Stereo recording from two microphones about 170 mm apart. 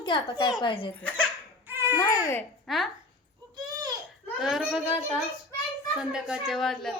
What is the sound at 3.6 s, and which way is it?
Baby cry, 20° right (ahead or behind).